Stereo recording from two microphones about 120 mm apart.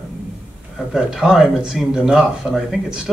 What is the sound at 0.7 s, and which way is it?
Speech, 5° right (ahead or behind).